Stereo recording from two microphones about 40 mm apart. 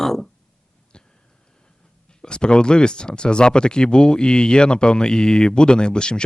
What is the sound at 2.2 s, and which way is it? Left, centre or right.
Speech, left.